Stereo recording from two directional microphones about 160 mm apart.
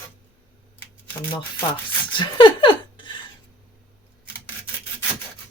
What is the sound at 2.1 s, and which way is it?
Speech, 30° left (ahead or behind).